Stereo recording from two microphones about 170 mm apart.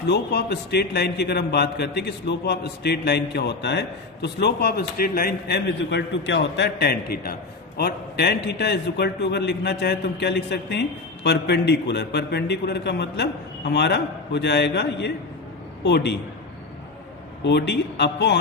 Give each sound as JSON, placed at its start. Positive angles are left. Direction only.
{"t": 0.0, "sound": "a man's voice", "side_deg": 80}
{"t": 17.4, "sound": "a man's voice", "side_deg": 85}